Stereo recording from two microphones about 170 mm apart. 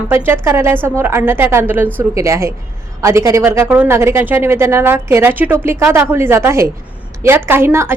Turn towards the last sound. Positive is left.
turn(degrees=-15)  # may be behind; listen again after turning